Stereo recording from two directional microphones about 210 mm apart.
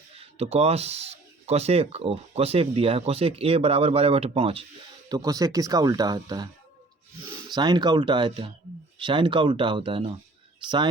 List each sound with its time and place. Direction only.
0.2 s speech: 30° right (ahead or behind)
7.5 s speech: 20° right (ahead or behind)